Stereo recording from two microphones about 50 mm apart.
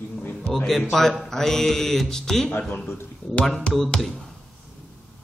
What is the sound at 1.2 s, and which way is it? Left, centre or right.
Mantra, centre.